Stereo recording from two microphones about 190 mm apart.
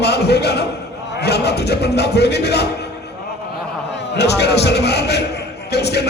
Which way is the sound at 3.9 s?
65° left (ahead or behind).